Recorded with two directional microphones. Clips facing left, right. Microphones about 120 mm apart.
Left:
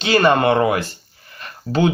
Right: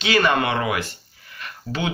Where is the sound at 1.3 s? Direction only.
35° left (ahead or behind).